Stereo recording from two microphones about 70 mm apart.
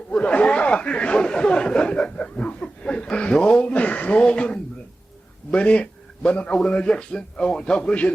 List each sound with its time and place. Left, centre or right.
0.2 s snicker: centre
2.0 s chuckle: centre
5.5 s a sound: centre